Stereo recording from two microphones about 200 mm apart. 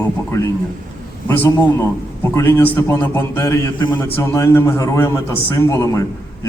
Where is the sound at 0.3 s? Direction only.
15° left (ahead or behind).